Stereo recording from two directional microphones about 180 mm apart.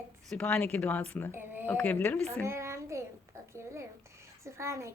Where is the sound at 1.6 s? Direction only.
10° left (ahead or behind).